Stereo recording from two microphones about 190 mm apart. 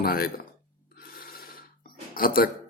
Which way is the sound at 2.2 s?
50° left (ahead or behind).